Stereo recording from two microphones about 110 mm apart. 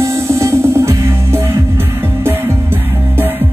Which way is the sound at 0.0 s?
25° right (ahead or behind).